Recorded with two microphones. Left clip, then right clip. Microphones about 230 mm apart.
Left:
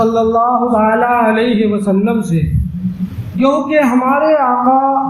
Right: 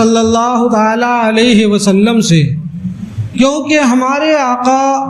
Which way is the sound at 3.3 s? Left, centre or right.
Right.